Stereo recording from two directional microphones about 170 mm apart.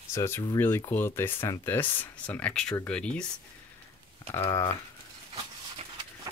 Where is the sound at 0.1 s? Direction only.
15° left (ahead or behind).